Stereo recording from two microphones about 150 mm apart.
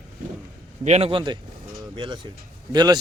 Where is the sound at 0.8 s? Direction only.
45° right (ahead or behind).